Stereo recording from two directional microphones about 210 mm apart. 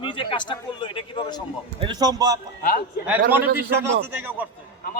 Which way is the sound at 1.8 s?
20° right (ahead or behind).